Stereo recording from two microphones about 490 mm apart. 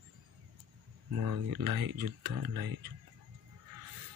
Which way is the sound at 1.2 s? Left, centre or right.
Right.